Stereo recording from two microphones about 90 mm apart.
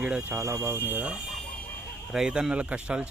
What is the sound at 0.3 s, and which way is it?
Speech, 30° right (ahead or behind).